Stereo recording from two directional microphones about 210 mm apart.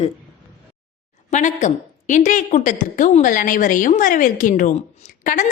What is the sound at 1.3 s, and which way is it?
A woman's voice, 35° left (ahead or behind).